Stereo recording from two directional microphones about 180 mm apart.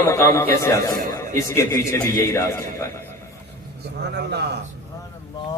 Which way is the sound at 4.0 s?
65° right (ahead or behind).